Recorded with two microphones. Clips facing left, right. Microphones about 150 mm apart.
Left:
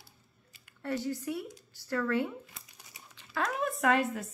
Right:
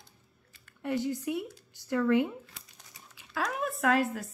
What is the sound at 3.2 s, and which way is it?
Speech, centre (ahead or behind).